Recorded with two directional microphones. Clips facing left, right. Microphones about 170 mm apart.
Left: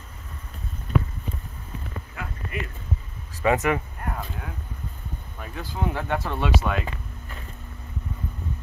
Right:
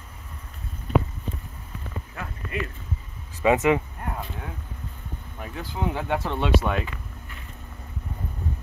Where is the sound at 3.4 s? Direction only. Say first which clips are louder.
Right 2 dB; 20° right (ahead or behind).